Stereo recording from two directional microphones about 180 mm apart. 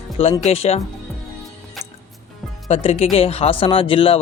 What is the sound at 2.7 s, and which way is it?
Speech, 35° left (ahead or behind).